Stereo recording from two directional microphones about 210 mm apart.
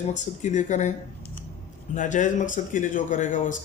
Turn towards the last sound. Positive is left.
turn(degrees=35)  # may be behind; listen again after turning